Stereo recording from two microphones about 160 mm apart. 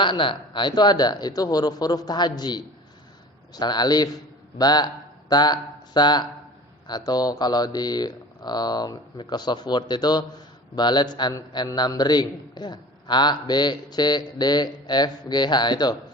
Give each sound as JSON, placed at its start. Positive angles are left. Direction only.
{"t": 0.0, "sound": "a man's voice", "side_deg": 30}